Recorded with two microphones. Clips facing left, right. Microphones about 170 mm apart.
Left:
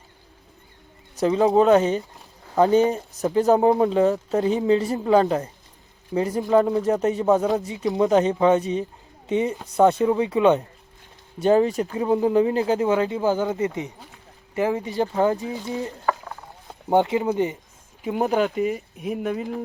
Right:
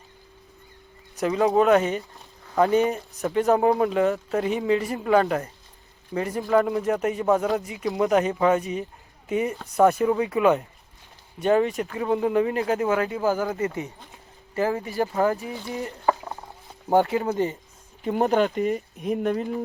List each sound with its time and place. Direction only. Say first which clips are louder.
1.2 s speech: left 3 dB; 30° left (ahead or behind)
4.4 s speech: left 4 dB; 30° left (ahead or behind)
11.9 s speech: left 3 dB; 20° left (ahead or behind)
16.9 s speech: left 1 dB; 20° left (ahead or behind)
18.0 s speech: even; 5° left (ahead or behind)